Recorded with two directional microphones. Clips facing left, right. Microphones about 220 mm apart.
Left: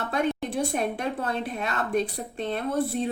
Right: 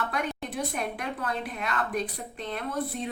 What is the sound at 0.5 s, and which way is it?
A woman's voice, 30° left (ahead or behind).